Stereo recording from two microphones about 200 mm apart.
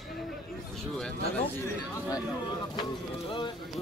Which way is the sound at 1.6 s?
15° left (ahead or behind).